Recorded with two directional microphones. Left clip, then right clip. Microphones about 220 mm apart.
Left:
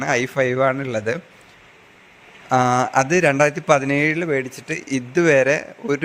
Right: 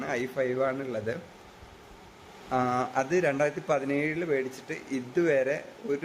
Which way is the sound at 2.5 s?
45° left (ahead or behind).